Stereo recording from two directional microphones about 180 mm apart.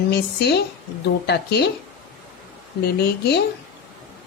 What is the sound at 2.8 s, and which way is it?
Speech, 65° left (ahead or behind).